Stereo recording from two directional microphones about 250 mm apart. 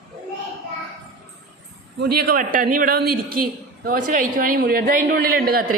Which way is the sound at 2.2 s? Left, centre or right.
Right.